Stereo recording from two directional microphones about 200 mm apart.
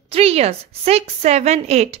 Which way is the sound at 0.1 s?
30° right (ahead or behind).